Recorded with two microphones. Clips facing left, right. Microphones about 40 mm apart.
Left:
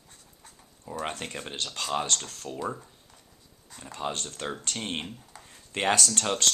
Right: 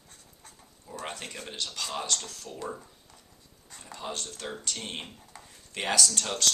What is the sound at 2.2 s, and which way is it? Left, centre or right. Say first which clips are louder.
Speech: left 2 dB; left.